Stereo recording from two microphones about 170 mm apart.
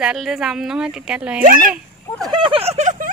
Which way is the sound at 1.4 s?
55° right (ahead or behind).